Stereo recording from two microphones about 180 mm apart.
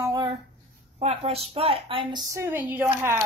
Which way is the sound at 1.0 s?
35° right (ahead or behind).